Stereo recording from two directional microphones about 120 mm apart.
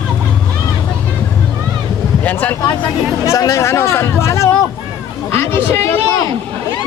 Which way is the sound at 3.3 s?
25° left (ahead or behind).